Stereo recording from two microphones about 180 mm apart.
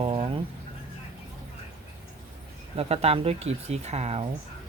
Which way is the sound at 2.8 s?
35° right (ahead or behind).